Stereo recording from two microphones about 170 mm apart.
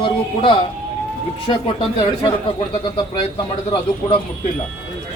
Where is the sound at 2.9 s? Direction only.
25° left (ahead or behind).